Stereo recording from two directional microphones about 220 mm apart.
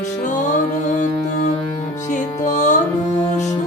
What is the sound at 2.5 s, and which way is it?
Music, 35° left (ahead or behind).